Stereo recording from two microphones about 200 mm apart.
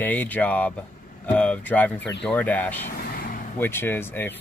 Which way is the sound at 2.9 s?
45° left (ahead or behind).